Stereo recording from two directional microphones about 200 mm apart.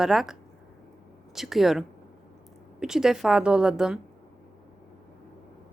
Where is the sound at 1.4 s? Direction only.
Centre (ahead or behind).